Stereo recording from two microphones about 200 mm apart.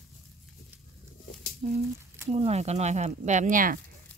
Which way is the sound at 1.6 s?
30° right (ahead or behind).